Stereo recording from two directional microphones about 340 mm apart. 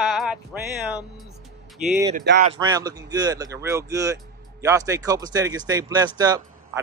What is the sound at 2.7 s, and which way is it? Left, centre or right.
Speech, centre.